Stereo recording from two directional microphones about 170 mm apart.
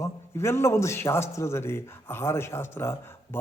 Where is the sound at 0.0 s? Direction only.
15° left (ahead or behind).